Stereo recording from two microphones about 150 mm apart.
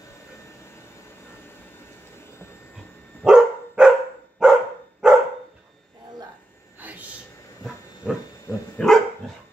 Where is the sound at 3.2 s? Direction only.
5° right (ahead or behind).